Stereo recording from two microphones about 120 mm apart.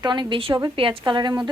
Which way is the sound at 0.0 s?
40° right (ahead or behind).